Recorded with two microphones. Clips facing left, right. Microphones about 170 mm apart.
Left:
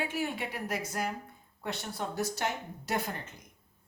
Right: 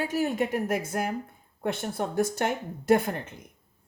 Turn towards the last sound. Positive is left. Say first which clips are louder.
# right 11 dB
turn(degrees=-55)  # may be behind; listen again after turning